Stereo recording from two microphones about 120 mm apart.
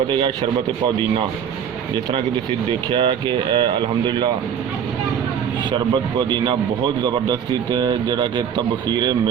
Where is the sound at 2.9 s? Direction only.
50° right (ahead or behind).